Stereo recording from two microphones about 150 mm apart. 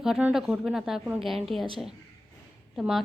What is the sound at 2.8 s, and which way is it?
Speech, centre (ahead or behind).